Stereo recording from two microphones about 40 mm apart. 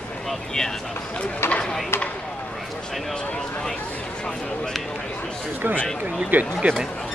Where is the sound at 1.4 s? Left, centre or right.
Left.